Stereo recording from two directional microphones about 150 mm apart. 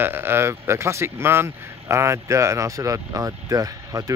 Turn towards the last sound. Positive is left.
turn(degrees=-20)  # may be behind; listen again after turning